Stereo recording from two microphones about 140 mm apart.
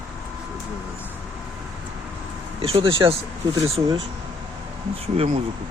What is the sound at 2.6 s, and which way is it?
Speech, 40° right (ahead or behind).